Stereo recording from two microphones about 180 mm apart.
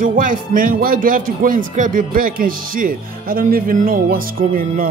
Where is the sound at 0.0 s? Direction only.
50° right (ahead or behind).